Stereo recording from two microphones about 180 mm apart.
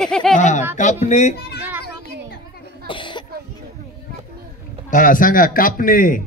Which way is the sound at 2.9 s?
25° left (ahead or behind).